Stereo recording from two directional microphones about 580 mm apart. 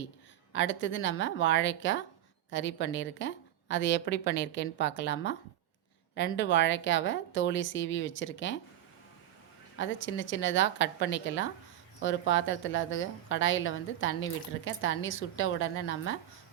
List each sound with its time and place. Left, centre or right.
0.5 s a woman's voice: centre
9.7 s a woman's voice: centre